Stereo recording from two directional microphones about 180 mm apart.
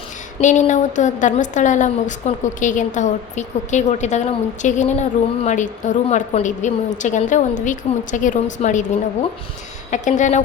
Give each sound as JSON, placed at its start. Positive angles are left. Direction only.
{"t": 0.3, "sound": "a woman's voice", "side_deg": 40}
{"t": 9.9, "sound": "a woman's voice", "side_deg": 45}